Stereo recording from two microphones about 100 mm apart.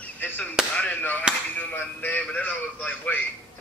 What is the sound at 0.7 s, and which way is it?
A woman's voice, 15° left (ahead or behind).